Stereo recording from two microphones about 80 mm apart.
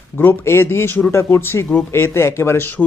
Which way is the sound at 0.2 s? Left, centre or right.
Left.